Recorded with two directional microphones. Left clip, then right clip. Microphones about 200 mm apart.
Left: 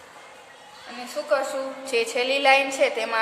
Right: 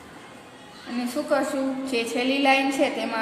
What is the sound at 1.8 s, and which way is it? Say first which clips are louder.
A woman's voice: left 5 dB; 25° left (ahead or behind).